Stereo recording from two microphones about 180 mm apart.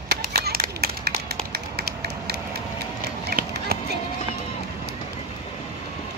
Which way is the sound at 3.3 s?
60° right (ahead or behind).